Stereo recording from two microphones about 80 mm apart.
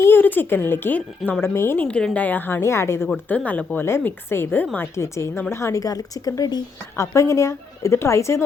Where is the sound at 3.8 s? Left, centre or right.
Left.